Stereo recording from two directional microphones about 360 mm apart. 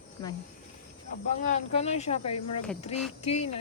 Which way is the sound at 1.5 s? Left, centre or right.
Centre.